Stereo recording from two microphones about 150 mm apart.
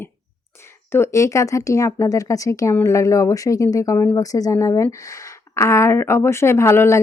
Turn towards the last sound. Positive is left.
turn(degrees=15)  # may be behind; listen again after turning